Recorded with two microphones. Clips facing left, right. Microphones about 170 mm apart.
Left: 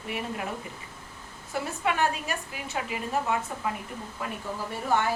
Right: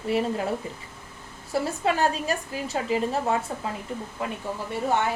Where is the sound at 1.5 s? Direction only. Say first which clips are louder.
Right 4 dB; 35° right (ahead or behind).